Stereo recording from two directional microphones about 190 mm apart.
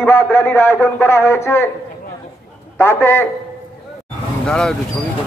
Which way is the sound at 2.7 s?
15° left (ahead or behind).